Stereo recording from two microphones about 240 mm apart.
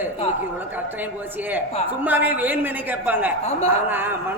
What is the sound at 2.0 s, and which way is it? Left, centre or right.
A man's voice, centre.